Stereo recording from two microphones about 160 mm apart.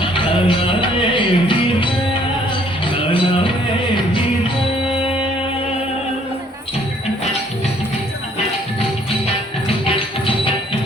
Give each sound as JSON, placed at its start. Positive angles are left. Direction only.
{"t": 0.0, "sound": "music", "side_deg": 30}
{"t": 9.8, "sound": "music", "side_deg": 35}